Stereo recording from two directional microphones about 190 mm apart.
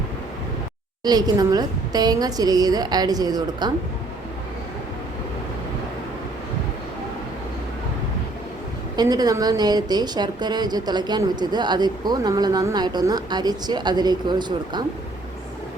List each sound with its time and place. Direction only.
1.0 s speech: 20° right (ahead or behind)
9.0 s speech: 20° right (ahead or behind)